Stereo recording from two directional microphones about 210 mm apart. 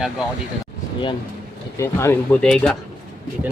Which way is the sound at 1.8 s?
10° left (ahead or behind).